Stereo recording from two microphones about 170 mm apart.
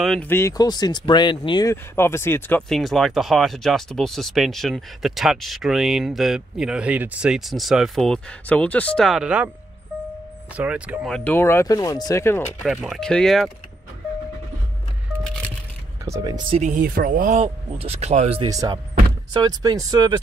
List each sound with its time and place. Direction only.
0.0 s speech: centre (ahead or behind)
0.3 s speech: 15° left (ahead or behind)
2.7 s speech: centre (ahead or behind)
10.5 s speech: 10° right (ahead or behind)
11.1 s speech: 5° left (ahead or behind)
12.6 s speech: centre (ahead or behind)
16.1 s speech: 25° right (ahead or behind)
16.6 s speech: 55° right (ahead or behind)
17.3 s speech: 35° right (ahead or behind)
18.4 s speech: 25° right (ahead or behind)